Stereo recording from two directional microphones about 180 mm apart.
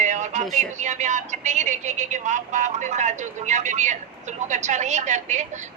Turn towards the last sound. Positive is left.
turn(degrees=-40)  # may be behind; listen again after turning